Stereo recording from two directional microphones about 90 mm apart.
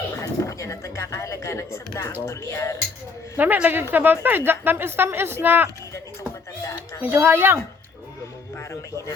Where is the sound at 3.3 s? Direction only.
20° right (ahead or behind).